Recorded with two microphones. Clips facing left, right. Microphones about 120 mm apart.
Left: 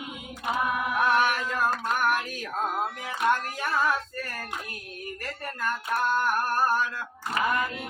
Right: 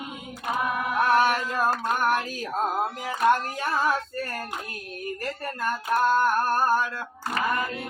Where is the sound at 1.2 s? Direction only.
35° right (ahead or behind).